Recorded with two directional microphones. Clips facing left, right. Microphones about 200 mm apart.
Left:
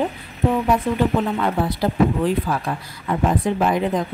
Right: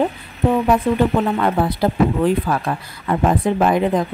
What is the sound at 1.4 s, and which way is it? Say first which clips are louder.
Speech: right 3 dB; 55° right (ahead or behind).